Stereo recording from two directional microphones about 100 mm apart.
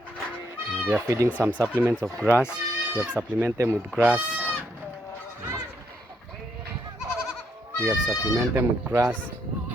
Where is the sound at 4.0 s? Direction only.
15° right (ahead or behind).